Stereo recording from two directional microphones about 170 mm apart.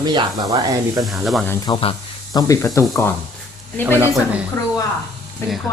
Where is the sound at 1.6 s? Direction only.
30° left (ahead or behind).